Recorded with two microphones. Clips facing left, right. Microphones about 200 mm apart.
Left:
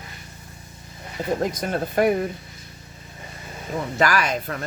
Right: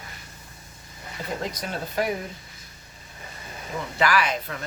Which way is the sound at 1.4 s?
50° left (ahead or behind).